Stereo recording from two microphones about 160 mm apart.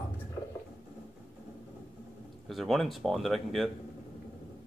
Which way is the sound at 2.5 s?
Centre (ahead or behind).